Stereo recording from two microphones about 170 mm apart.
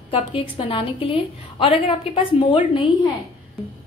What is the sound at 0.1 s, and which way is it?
A woman's voice, 30° left (ahead or behind).